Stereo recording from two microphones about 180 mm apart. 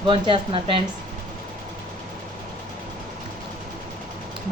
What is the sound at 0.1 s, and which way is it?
Speech, 30° right (ahead or behind).